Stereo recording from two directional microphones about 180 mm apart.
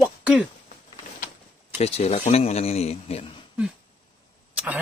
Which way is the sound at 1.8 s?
35° left (ahead or behind).